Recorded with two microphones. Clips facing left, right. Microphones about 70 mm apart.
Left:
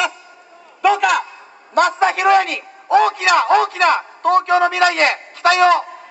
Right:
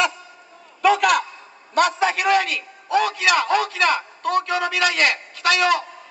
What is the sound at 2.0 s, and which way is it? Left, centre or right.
A man's voice, left.